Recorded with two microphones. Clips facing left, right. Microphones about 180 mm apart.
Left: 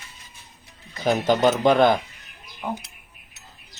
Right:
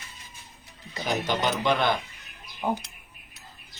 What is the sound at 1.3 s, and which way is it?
Speech, 45° left (ahead or behind).